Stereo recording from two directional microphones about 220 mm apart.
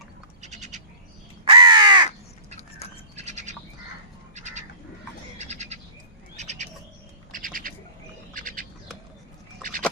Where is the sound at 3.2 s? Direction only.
30° right (ahead or behind).